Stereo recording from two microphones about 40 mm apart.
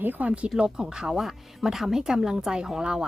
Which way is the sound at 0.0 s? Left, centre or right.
Right.